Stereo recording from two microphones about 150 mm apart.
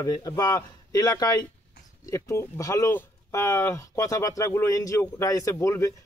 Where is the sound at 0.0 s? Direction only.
25° left (ahead or behind).